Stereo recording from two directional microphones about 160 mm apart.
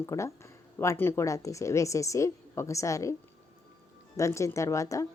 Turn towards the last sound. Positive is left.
turn(degrees=20)  # may be behind; listen again after turning